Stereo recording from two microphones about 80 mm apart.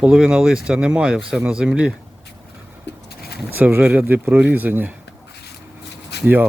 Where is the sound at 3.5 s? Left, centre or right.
Right.